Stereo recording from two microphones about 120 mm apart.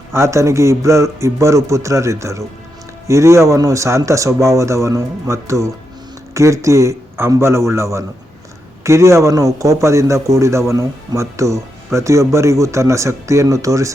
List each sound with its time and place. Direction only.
0.1 s a man's voice: 25° right (ahead or behind)